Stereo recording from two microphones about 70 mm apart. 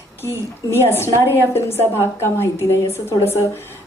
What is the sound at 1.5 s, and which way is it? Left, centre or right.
A woman's voice, left.